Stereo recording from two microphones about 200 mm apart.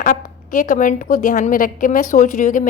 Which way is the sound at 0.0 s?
45° left (ahead or behind).